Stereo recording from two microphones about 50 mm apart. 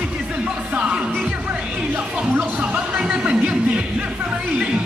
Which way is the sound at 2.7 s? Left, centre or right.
Centre.